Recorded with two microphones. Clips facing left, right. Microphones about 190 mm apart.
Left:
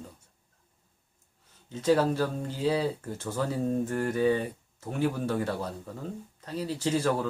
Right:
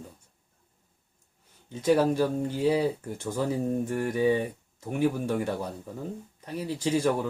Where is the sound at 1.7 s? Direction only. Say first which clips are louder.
Right 2 dB; 15° right (ahead or behind).